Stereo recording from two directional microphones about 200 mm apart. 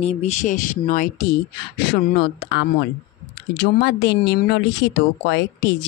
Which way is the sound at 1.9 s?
55° left (ahead or behind).